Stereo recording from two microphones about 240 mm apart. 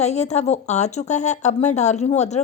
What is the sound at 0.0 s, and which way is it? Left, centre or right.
Speech, left.